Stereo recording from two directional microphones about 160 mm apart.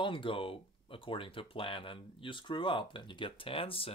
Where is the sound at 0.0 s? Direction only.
30° left (ahead or behind).